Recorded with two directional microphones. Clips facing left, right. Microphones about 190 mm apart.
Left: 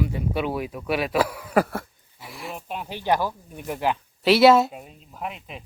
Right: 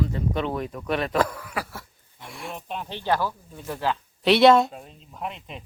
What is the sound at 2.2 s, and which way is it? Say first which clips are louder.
Speech: left 1 dB; centre (ahead or behind).